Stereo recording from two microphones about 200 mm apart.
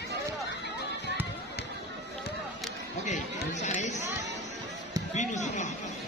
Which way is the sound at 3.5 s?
35° left (ahead or behind).